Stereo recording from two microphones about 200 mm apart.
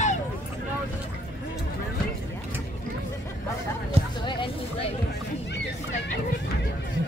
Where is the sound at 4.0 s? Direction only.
30° right (ahead or behind).